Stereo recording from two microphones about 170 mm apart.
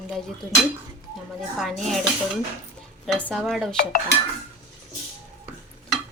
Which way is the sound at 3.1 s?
5° left (ahead or behind).